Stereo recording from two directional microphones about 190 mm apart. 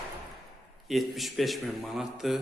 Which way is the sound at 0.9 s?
Centre (ahead or behind).